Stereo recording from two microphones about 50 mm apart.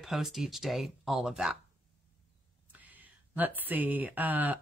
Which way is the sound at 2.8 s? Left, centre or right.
Right.